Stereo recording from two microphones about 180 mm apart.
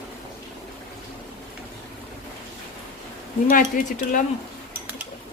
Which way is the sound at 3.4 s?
45° left (ahead or behind).